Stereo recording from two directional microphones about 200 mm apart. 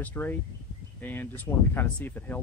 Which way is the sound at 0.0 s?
10° left (ahead or behind).